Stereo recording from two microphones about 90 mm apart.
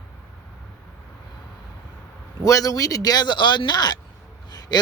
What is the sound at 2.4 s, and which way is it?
Speech, 40° left (ahead or behind).